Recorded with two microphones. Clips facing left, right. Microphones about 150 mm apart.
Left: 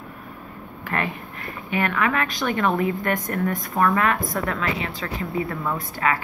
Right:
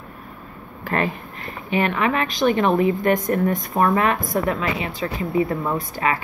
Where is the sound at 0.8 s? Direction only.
35° right (ahead or behind).